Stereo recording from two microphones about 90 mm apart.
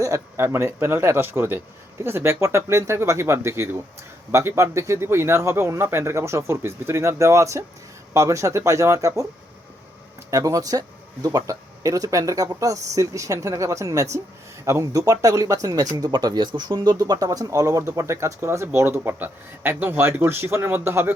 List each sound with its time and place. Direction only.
0.0 s speech: 30° right (ahead or behind)
10.3 s speech: 40° right (ahead or behind)